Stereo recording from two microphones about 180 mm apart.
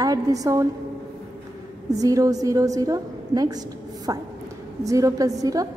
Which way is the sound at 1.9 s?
20° right (ahead or behind).